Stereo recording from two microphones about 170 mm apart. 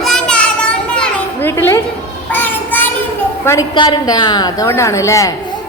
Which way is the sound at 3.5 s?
25° left (ahead or behind).